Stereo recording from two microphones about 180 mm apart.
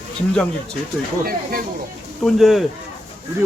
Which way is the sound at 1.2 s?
55° right (ahead or behind).